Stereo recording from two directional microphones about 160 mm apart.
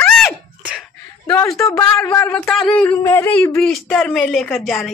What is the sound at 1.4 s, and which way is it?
A woman's voice, 20° left (ahead or behind).